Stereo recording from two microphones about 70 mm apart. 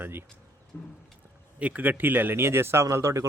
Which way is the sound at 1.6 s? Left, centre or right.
Right.